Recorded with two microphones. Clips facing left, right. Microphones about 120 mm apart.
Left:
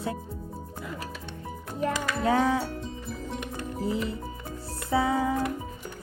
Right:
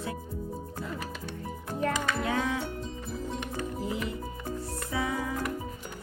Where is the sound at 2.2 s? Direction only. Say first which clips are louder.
Left 6 dB; 35° left (ahead or behind).